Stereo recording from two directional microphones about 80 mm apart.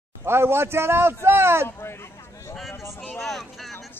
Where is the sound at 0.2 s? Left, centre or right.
Right.